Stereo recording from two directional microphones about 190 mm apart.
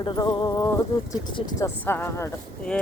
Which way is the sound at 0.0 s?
25° left (ahead or behind).